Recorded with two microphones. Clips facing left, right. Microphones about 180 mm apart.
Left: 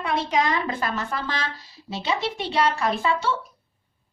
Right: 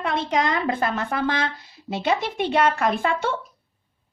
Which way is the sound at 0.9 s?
55° right (ahead or behind).